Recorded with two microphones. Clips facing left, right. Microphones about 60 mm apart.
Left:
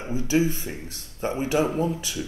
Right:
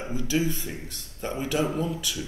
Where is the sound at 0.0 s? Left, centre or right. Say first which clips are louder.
Left 4 dB; left.